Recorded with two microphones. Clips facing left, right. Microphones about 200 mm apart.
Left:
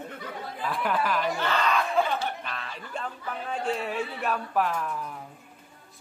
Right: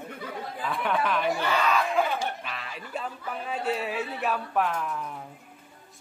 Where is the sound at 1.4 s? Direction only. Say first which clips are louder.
Right 1 dB; 10° right (ahead or behind).